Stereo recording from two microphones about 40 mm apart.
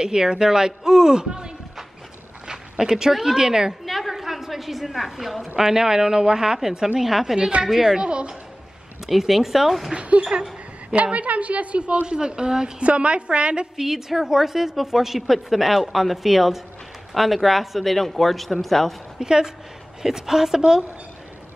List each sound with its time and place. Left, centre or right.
0.0 s speech: centre
2.8 s speech: centre
3.8 s a sound: centre
5.6 s speech: centre
8.0 s a woman's voice: right
9.0 s speech: centre
9.9 s a woman's voice: right; by 12.7 s centre
12.8 s a woman's voice: right
13.7 s a woman's voice: centre
19.1 s a woman's voice: centre